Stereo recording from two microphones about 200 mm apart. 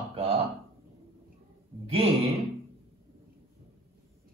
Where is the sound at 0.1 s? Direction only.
30° right (ahead or behind).